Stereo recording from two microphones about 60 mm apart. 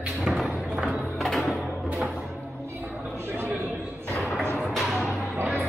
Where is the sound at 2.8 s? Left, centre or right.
Right.